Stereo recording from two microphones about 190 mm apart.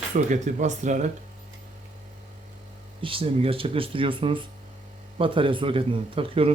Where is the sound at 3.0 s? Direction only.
30° right (ahead or behind).